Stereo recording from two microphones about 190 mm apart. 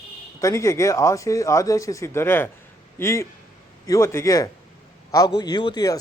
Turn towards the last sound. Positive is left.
turn(degrees=20)  # may be behind; listen again after turning